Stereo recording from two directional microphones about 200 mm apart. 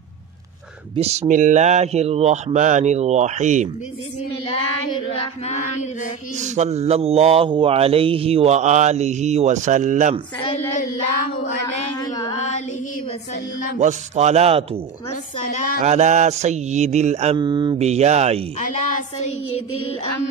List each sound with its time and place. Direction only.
0.9 s speech: 35° right (ahead or behind)
5.1 s chant: 35° left (ahead or behind)
6.3 s speech: 35° right (ahead or behind)
11.6 s a sound: 20° left (ahead or behind)
12.4 s female singing: 35° left (ahead or behind)
13.7 s speech: 35° right (ahead or behind)
15.4 s a woman's voice: 45° left (ahead or behind)
15.8 s speech: 35° right (ahead or behind)
17.4 s speech: 20° right (ahead or behind)
17.8 s speech: 35° right (ahead or behind)
18.9 s a woman's voice: 40° left (ahead or behind)